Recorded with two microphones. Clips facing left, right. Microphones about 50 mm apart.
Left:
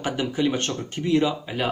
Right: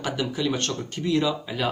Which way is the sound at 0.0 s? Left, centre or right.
Left.